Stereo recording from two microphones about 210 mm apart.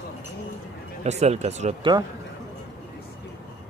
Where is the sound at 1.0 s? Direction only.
30° right (ahead or behind).